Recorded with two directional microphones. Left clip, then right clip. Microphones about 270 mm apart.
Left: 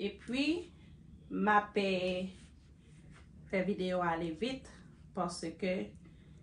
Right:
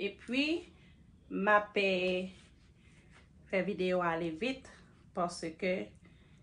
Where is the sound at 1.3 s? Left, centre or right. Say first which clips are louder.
Right 1 dB; right.